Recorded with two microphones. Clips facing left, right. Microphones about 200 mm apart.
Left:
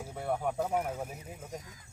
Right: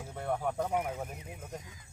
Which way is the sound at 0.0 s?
5° left (ahead or behind).